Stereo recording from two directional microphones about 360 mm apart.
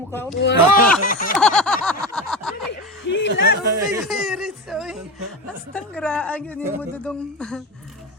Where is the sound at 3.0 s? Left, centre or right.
Left.